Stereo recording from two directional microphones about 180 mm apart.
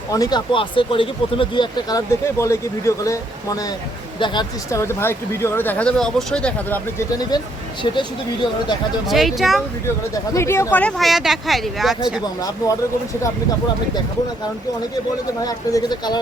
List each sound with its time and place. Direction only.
0.1 s speech: 20° left (ahead or behind)
7.2 s speech: 20° left (ahead or behind)
9.0 s speech: centre (ahead or behind)
10.3 s speech: 15° left (ahead or behind); by 11.9 s centre (ahead or behind)
12.4 s speech: 20° left (ahead or behind)
15.4 s speech: 20° left (ahead or behind)